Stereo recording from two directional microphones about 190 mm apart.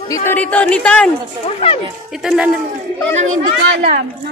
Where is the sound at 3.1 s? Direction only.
40° right (ahead or behind).